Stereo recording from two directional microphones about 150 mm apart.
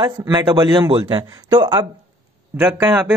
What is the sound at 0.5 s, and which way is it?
Speech, 30° right (ahead or behind).